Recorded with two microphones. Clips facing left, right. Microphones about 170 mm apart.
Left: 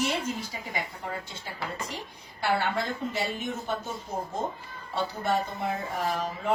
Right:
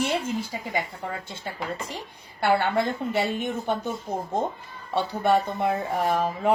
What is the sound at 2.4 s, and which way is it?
A woman's voice, 55° right (ahead or behind).